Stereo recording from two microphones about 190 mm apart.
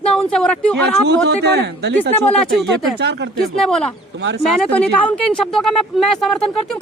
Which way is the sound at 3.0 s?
60° right (ahead or behind).